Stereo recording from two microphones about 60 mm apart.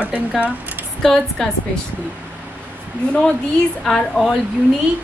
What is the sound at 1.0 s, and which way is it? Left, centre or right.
Speech, centre.